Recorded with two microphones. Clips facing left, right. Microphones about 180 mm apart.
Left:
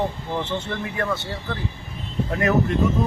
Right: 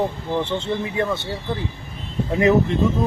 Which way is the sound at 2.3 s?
20° right (ahead or behind).